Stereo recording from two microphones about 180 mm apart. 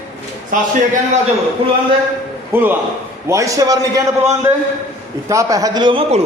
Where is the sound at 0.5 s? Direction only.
45° right (ahead or behind).